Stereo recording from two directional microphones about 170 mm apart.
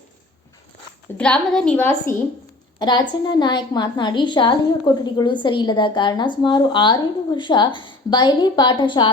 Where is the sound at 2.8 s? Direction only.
25° left (ahead or behind).